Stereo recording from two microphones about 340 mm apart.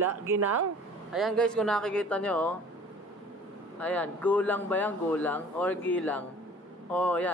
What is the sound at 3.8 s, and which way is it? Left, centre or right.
Speech, centre.